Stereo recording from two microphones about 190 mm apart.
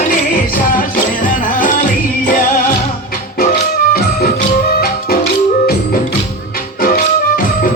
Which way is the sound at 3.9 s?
50° left (ahead or behind).